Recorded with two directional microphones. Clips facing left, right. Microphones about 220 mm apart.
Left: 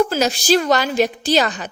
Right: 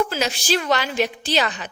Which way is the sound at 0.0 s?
40° left (ahead or behind).